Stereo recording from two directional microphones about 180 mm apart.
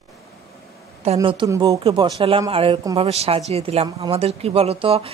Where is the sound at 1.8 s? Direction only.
30° right (ahead or behind).